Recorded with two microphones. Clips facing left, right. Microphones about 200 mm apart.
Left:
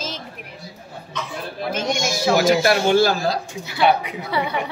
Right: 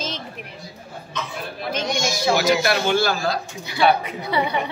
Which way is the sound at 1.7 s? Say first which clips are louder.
Left 1 dB; 5° left (ahead or behind).